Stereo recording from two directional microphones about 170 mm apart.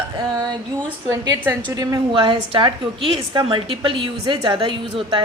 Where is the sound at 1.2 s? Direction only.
25° right (ahead or behind).